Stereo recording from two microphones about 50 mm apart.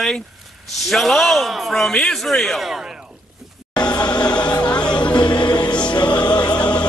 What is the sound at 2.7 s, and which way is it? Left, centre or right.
Speech, centre.